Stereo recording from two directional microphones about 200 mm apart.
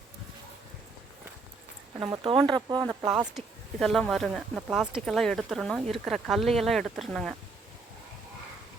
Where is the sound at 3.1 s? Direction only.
5° right (ahead or behind).